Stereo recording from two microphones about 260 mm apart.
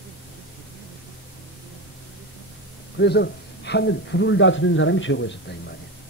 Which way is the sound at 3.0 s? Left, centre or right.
Left.